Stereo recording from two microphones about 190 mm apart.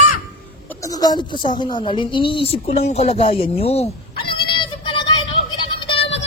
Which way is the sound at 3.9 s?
25° left (ahead or behind).